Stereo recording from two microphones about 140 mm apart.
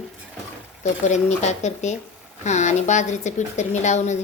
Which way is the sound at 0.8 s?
55° left (ahead or behind).